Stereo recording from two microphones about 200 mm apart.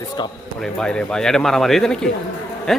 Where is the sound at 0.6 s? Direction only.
5° left (ahead or behind).